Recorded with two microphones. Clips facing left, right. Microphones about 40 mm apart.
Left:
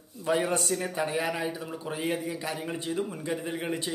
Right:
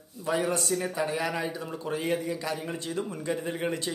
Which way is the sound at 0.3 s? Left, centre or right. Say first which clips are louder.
Left 1 dB; left.